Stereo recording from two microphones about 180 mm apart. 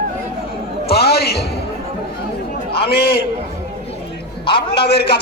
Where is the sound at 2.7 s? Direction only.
60° left (ahead or behind).